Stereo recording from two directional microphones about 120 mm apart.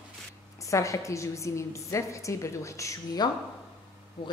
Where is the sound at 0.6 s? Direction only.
25° left (ahead or behind).